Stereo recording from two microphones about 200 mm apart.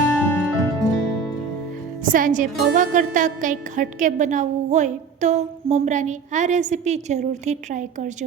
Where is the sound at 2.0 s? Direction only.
40° right (ahead or behind).